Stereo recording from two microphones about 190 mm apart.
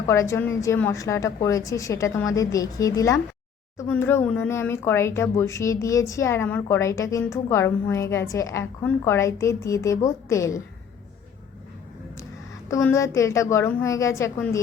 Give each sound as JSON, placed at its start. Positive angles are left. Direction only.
{"t": 0.1, "sound": "speech", "side_deg": 15}
{"t": 12.6, "sound": "speech", "side_deg": 15}